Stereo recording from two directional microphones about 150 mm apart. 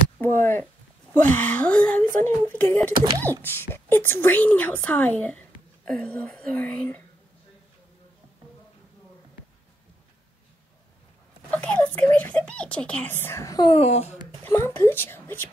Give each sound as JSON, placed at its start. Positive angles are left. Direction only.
{"t": 0.2, "sound": "a sound", "side_deg": 15}
{"t": 1.1, "sound": "a child's voice", "side_deg": 15}
{"t": 11.5, "sound": "a child's voice", "side_deg": 10}
{"t": 13.7, "sound": "speech", "side_deg": 45}
{"t": 14.4, "sound": "a child's voice", "side_deg": 15}